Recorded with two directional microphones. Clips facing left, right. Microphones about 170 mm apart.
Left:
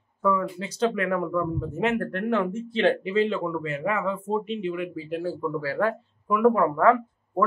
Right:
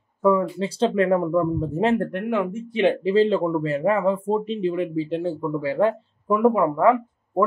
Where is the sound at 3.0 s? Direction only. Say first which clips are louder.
Right 6 dB; 35° right (ahead or behind); by 7.4 s 15° right (ahead or behind).